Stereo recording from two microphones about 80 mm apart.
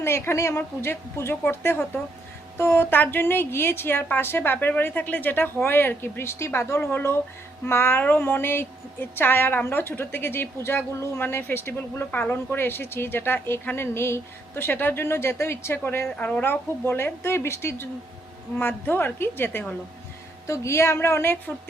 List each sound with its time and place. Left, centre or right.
0.0 s a woman's voice: left
16.1 s a woman's voice: centre